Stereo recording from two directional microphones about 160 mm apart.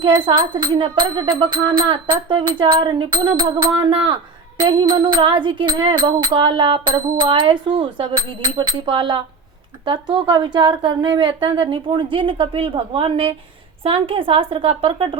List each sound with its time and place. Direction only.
0.0 s music: 30° right (ahead or behind)
12.1 s a woman's voice: 30° right (ahead or behind)